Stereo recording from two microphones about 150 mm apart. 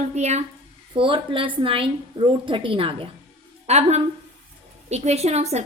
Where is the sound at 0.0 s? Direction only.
50° right (ahead or behind).